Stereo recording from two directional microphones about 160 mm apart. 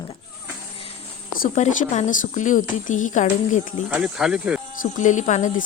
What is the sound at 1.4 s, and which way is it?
Speech, 45° left (ahead or behind).